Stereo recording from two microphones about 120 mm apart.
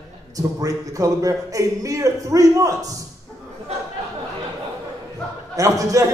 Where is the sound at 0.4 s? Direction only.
30° right (ahead or behind).